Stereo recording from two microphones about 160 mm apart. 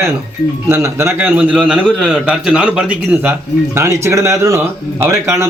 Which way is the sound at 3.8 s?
15° right (ahead or behind).